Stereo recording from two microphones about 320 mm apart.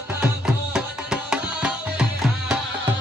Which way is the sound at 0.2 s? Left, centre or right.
Centre.